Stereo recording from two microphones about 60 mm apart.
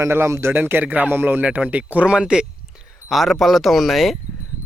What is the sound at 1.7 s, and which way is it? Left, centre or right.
Speech, right.